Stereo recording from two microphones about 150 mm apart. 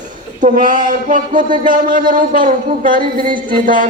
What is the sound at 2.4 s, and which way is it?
Speech, 60° right (ahead or behind).